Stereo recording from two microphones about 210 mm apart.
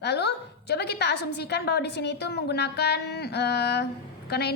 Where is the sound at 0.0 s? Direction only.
50° left (ahead or behind).